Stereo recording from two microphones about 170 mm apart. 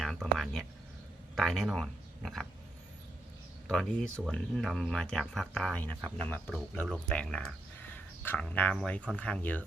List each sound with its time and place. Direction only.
0.0 s a sound: centre (ahead or behind)
1.4 s speech: centre (ahead or behind)
3.7 s speech: 5° left (ahead or behind)